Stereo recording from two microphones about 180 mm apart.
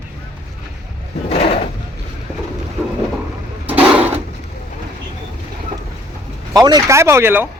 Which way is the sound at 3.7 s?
10° right (ahead or behind).